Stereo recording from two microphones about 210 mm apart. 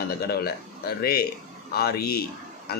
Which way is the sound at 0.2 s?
50° left (ahead or behind).